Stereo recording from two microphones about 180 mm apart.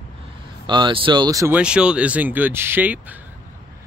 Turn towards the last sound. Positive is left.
turn(degrees=-10)  # may be behind; listen again after turning